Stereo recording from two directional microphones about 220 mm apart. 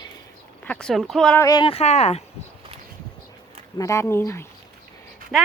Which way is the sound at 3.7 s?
15° left (ahead or behind).